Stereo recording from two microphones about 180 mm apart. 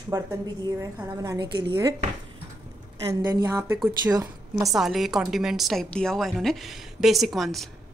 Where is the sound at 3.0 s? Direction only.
15° right (ahead or behind).